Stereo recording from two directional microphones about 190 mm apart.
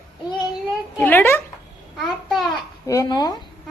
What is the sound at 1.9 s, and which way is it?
Speech, centre (ahead or behind).